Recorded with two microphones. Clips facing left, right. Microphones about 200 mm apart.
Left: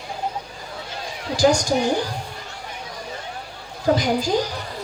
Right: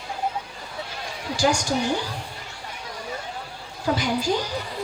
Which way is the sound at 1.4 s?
40° left (ahead or behind).